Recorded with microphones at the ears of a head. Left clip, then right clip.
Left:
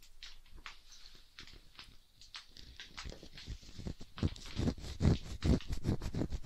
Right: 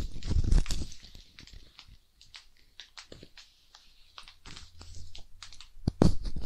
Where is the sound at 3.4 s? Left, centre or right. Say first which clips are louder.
Left 6 dB; left.